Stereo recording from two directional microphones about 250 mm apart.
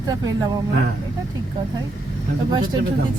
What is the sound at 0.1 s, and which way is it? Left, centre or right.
Speech, centre.